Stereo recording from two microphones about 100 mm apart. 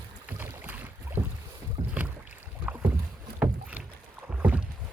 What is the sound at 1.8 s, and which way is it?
Rowboat, 45° right (ahead or behind).